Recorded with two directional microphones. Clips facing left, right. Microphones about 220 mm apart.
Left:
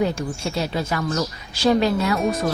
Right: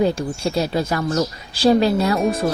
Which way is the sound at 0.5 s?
40° right (ahead or behind).